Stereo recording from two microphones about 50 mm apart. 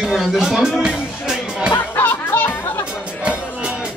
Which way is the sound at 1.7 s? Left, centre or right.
Left.